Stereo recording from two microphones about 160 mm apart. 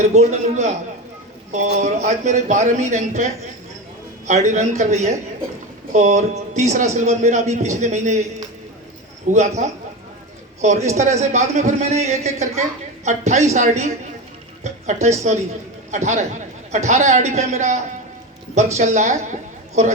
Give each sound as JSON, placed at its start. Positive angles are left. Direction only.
{"t": 0.1, "sound": "speech", "side_deg": -45}
{"t": 4.3, "sound": "speech", "side_deg": -45}
{"t": 15.0, "sound": "speech", "side_deg": -45}
{"t": 18.8, "sound": "a woman's voice", "side_deg": -45}